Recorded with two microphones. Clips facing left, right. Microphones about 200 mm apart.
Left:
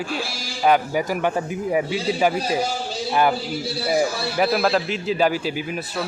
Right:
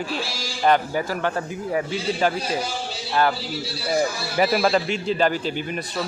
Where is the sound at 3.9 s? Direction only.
Centre (ahead or behind).